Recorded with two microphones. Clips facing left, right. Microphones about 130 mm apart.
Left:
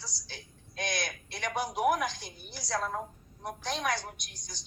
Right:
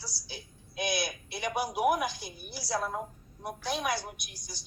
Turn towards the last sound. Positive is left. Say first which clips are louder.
# right 2 dB
turn(degrees=-10)  # may be behind; listen again after turning